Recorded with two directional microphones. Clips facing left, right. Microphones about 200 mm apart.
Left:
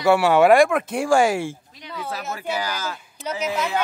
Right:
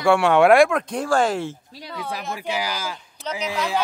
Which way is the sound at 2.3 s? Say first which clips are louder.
Even; 10° right (ahead or behind).